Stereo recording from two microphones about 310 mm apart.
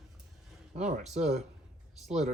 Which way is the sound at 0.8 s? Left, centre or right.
Right.